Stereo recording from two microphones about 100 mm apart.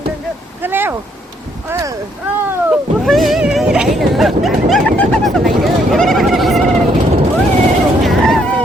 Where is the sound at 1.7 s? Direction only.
35° right (ahead or behind).